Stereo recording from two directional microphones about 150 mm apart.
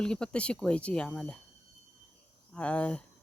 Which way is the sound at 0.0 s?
5° left (ahead or behind).